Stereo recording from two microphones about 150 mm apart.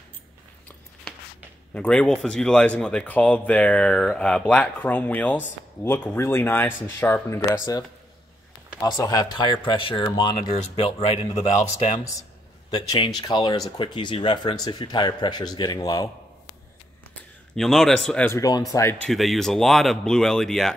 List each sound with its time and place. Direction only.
1.7 s a man's voice: 10° left (ahead or behind); by 11.4 s 40° left (ahead or behind)
12.7 s speech: 30° left (ahead or behind)
17.6 s speech: centre (ahead or behind)
18.3 s speech: 25° left (ahead or behind)
19.0 s speech: centre (ahead or behind)